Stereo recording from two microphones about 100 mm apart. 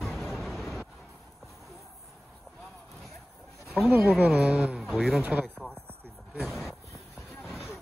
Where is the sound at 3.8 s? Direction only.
20° right (ahead or behind).